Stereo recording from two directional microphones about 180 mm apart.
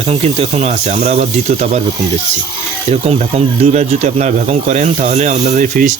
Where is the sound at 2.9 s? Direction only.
35° right (ahead or behind).